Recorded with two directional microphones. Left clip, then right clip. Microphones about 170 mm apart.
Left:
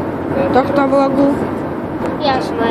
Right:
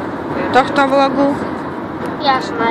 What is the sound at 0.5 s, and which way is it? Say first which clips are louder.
Speech: right 2 dB; 10° right (ahead or behind).